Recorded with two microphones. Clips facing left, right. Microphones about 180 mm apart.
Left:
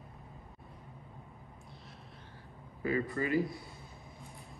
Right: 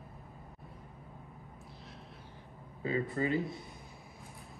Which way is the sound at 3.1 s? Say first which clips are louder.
Left 1 dB; 25° right (ahead or behind).